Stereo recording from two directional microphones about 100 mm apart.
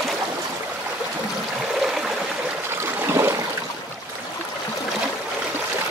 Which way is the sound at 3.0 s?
25° right (ahead or behind).